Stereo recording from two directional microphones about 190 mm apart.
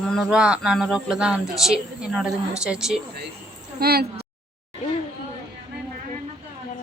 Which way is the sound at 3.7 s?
55° right (ahead or behind).